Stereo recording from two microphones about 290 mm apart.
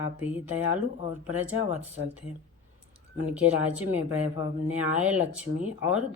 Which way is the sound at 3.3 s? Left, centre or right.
Centre.